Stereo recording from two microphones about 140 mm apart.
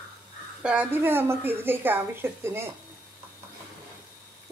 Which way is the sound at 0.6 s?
10° right (ahead or behind).